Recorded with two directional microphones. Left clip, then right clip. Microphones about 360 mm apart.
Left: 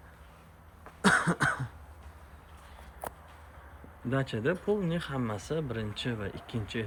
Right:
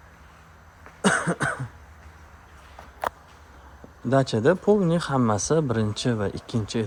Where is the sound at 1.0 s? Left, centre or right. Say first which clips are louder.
Right 3 dB; centre.